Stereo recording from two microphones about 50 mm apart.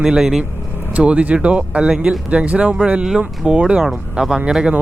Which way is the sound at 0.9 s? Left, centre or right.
Right.